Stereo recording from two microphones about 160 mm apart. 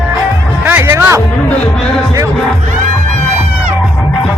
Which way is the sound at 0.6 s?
15° right (ahead or behind).